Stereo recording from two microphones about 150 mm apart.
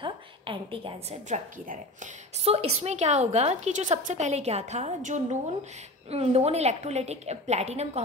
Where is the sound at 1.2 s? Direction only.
55° right (ahead or behind).